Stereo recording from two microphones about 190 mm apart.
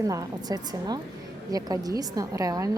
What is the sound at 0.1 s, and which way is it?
A woman's voice, 20° right (ahead or behind).